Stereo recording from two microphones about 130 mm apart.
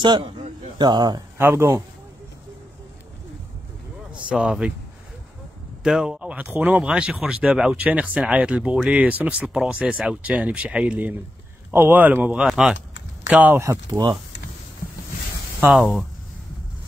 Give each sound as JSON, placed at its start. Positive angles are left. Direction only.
{"t": 0.0, "sound": "speech", "side_deg": -35}
{"t": 1.4, "sound": "speech", "side_deg": -20}
{"t": 4.3, "sound": "speech", "side_deg": -5}
{"t": 5.9, "sound": "speech", "side_deg": -5}
{"t": 15.7, "sound": "speech", "side_deg": 0}